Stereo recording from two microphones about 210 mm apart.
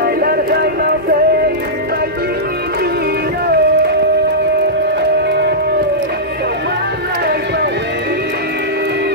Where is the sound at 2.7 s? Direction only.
50° right (ahead or behind).